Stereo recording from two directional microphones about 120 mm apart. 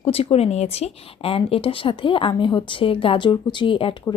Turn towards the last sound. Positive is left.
turn(degrees=45)  # may be behind; listen again after turning